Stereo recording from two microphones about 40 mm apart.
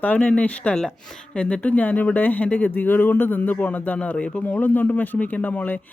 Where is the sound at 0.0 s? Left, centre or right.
Left.